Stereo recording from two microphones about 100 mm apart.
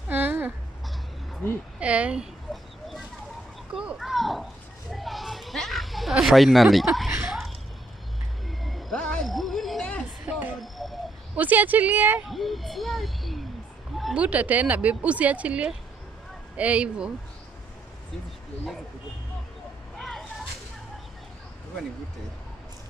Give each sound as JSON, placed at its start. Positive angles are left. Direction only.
{"t": 0.1, "sound": "a sound", "side_deg": -20}
{"t": 1.4, "sound": "a woman's voice", "side_deg": 20}
{"t": 1.8, "sound": "speech", "side_deg": -10}
{"t": 2.5, "sound": "a sound", "side_deg": 0}
{"t": 3.7, "sound": "speech", "side_deg": -10}
{"t": 4.9, "sound": "a sound", "side_deg": 0}
{"t": 10.3, "sound": "a sound", "side_deg": -15}
{"t": 10.6, "sound": "bird", "side_deg": 0}
{"t": 11.3, "sound": "speech", "side_deg": -15}
{"t": 12.3, "sound": "speech", "side_deg": 0}
{"t": 14.1, "sound": "speech", "side_deg": -15}
{"t": 20.0, "sound": "vehicle", "side_deg": 0}